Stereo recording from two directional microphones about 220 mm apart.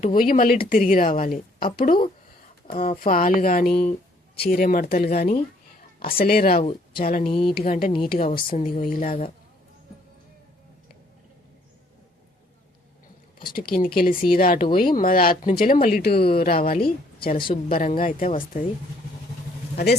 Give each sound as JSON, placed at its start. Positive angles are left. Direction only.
{"t": 0.0, "sound": "speech", "side_deg": 40}
{"t": 2.6, "sound": "speech", "side_deg": 30}
{"t": 7.3, "sound": "speech", "side_deg": 25}
{"t": 7.6, "sound": "speech", "side_deg": 35}
{"t": 13.5, "sound": "speech", "side_deg": 40}
{"t": 19.7, "sound": "speech", "side_deg": 45}